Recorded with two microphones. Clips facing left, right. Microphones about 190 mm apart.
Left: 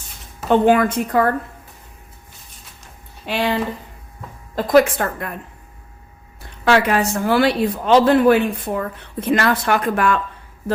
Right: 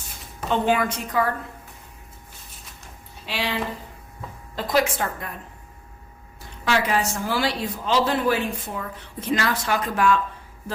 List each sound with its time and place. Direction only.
0.5 s a woman's voice: 55° left (ahead or behind)
3.2 s a woman's voice: 50° left (ahead or behind)
6.7 s a woman's voice: 65° left (ahead or behind)